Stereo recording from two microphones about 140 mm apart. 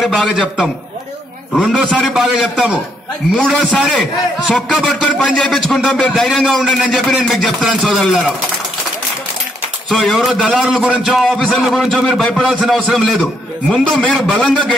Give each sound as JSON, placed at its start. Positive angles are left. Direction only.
{"t": 0.0, "sound": "a man's voice", "side_deg": 0}
{"t": 9.8, "sound": "a man's voice", "side_deg": 0}